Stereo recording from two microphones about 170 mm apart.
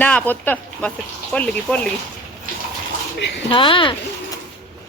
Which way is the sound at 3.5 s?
30° left (ahead or behind).